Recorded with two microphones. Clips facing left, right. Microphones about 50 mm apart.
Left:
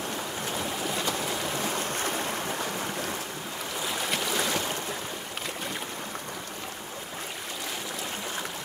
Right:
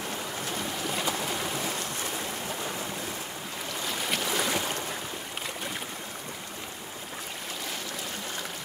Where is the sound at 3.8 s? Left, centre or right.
Centre.